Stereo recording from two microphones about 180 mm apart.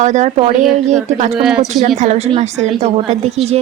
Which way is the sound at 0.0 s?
40° right (ahead or behind).